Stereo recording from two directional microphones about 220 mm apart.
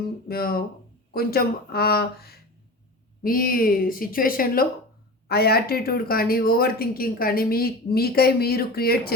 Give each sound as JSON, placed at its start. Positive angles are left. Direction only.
{"t": 0.3, "sound": "a woman's voice", "side_deg": 45}